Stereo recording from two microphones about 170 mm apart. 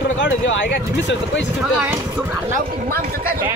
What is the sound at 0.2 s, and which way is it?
Speech, 90° left.